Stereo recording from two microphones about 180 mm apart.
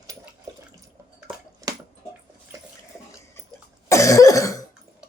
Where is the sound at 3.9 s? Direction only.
15° left (ahead or behind).